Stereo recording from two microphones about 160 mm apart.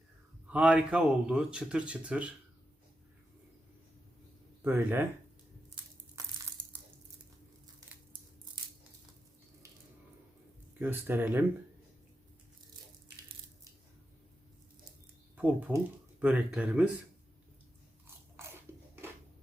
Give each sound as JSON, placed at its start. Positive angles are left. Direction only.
{"t": 0.4, "sound": "speech", "side_deg": -10}
{"t": 4.6, "sound": "speech", "side_deg": -15}
{"t": 6.2, "sound": "crushing", "side_deg": -20}
{"t": 10.8, "sound": "speech", "side_deg": -10}
{"t": 15.4, "sound": "speech", "side_deg": -10}